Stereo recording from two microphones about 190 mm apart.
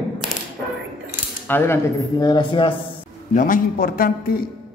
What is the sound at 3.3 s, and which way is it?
A man's voice, 45° left (ahead or behind).